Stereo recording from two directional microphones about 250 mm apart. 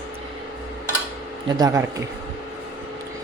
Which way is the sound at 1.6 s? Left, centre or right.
Centre.